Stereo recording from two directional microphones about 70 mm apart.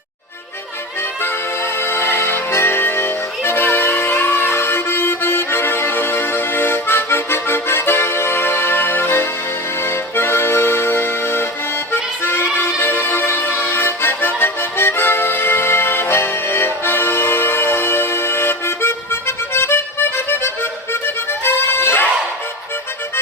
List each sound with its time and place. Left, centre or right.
1.2 s music: left
9.8 s accordion: left
12.2 s music: left